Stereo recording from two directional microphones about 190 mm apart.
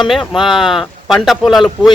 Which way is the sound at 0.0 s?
Centre (ahead or behind).